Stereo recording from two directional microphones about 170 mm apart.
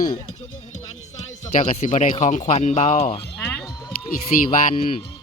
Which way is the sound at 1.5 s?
45° left (ahead or behind).